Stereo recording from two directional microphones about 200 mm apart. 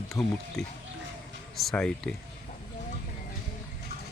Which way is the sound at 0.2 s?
Centre (ahead or behind).